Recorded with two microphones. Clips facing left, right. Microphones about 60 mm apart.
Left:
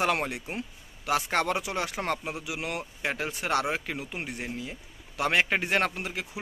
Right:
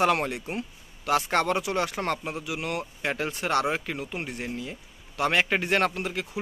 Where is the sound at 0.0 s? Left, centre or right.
Centre.